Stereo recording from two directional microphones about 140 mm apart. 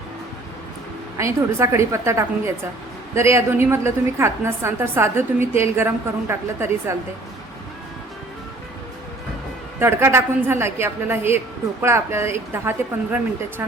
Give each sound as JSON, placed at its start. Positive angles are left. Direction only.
{"t": 1.2, "sound": "a woman's voice", "side_deg": -20}
{"t": 9.8, "sound": "a woman's voice", "side_deg": -20}